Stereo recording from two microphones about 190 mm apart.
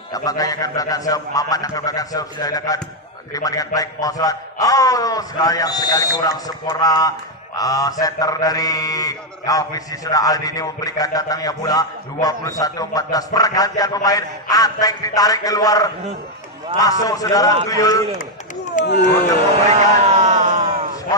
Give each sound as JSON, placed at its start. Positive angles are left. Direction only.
{"t": 0.1, "sound": "a man's voice", "side_deg": 20}
{"t": 18.8, "sound": "speech", "side_deg": 40}
{"t": 19.7, "sound": "a sound", "side_deg": -35}